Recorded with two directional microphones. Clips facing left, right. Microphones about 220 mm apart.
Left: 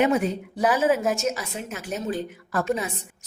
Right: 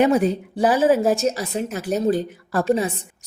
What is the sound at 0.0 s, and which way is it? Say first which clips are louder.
A woman's voice: right 4 dB; 35° right (ahead or behind).